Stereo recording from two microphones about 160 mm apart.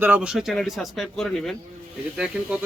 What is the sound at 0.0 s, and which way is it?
Speech, 10° right (ahead or behind).